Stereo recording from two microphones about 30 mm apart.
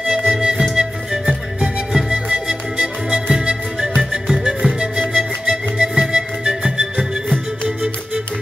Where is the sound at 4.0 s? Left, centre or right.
Centre.